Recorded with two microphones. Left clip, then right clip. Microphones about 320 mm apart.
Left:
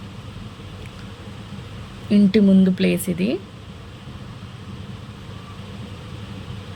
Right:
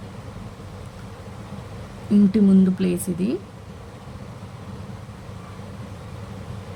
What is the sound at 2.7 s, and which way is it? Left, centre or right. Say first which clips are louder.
Speech: left 4 dB; left.